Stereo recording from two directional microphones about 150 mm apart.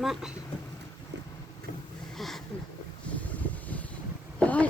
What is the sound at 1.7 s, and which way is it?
Boat, 65° left (ahead or behind).